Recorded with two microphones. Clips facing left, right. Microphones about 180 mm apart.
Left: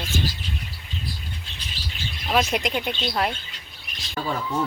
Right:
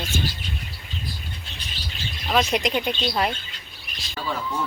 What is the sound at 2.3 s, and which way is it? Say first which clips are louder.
Speech: right 1 dB; 5° left (ahead or behind).